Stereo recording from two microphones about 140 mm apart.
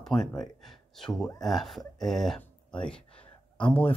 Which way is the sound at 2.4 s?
5° left (ahead or behind).